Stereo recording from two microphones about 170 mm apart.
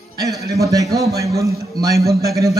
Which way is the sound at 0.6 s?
20° right (ahead or behind).